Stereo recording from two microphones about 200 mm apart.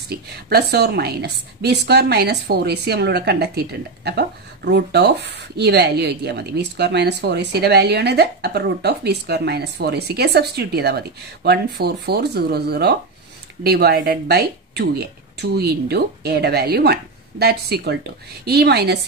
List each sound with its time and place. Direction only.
0.1 s a woman's voice: 55° right (ahead or behind)